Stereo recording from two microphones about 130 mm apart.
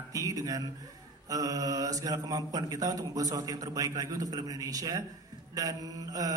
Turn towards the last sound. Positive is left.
turn(degrees=-25)  # may be behind; listen again after turning